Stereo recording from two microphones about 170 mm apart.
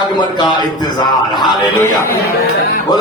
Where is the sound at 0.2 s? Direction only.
25° left (ahead or behind).